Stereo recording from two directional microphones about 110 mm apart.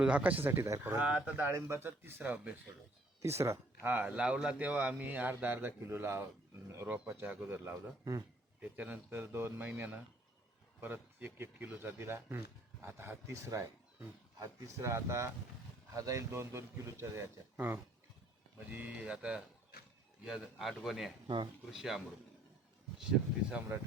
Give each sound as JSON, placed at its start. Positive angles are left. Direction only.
{"t": 0.0, "sound": "a man's voice", "side_deg": -15}
{"t": 1.0, "sound": "speech", "side_deg": -10}
{"t": 3.2, "sound": "a man's voice", "side_deg": -25}
{"t": 8.6, "sound": "a man's voice", "side_deg": -15}
{"t": 21.2, "sound": "speech", "side_deg": -45}
{"t": 21.7, "sound": "a man's voice", "side_deg": -5}